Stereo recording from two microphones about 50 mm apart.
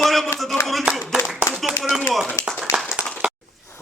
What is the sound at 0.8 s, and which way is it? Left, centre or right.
Clapping, centre.